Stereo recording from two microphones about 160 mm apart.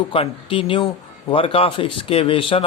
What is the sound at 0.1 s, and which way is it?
Speech, 35° left (ahead or behind).